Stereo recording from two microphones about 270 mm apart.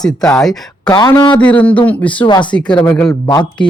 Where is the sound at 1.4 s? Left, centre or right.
Centre.